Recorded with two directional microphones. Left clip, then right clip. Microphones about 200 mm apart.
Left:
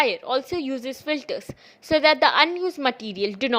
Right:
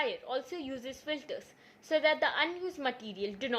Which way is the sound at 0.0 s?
35° left (ahead or behind).